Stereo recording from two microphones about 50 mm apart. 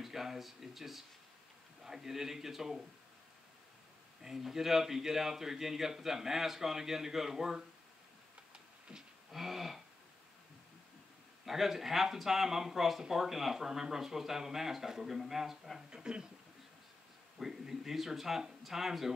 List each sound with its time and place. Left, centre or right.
0.0 s speech: centre
4.2 s speech: centre
9.3 s speech: centre
11.4 s speech: centre
15.9 s speech: centre
17.4 s speech: centre